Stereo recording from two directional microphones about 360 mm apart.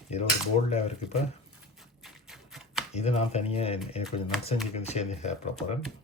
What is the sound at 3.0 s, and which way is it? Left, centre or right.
Speech, centre.